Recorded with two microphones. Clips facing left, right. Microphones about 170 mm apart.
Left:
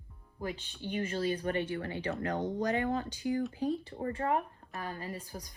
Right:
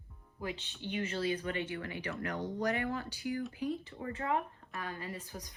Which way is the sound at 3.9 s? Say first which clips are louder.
Left 3 dB; 40° left (ahead or behind).